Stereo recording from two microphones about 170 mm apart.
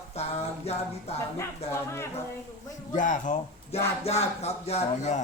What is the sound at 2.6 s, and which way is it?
Speech, 50° left (ahead or behind).